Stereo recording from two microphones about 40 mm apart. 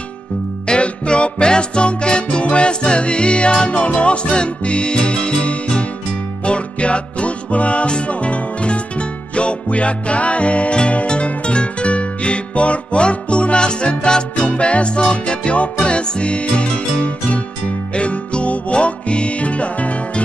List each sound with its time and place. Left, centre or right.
0.7 s music: left